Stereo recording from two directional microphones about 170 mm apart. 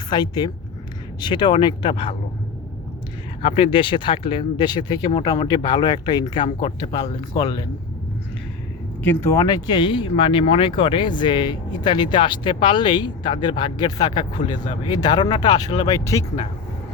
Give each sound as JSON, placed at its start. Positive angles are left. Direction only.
{"t": 0.1, "sound": "speech", "side_deg": 25}
{"t": 3.4, "sound": "speech", "side_deg": 35}
{"t": 9.0, "sound": "speech", "side_deg": 15}